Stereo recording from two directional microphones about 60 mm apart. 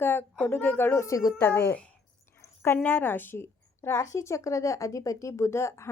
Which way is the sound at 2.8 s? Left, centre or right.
Left.